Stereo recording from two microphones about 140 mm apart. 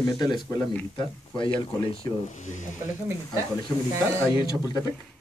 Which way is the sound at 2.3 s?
60° left (ahead or behind).